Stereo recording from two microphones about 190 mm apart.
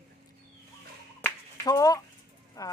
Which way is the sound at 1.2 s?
15° left (ahead or behind).